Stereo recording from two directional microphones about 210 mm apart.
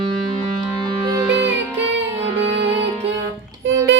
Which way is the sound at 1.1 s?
10° right (ahead or behind).